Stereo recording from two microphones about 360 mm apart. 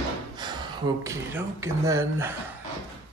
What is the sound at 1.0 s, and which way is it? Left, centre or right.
Speech, centre.